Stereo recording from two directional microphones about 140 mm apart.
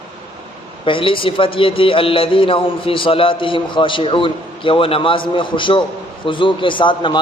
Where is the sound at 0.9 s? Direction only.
35° left (ahead or behind).